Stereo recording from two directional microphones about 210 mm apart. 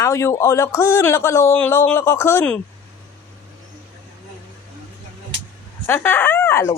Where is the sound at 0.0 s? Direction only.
15° left (ahead or behind).